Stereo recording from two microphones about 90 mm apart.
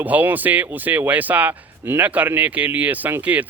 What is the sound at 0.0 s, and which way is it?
Speech, 20° right (ahead or behind).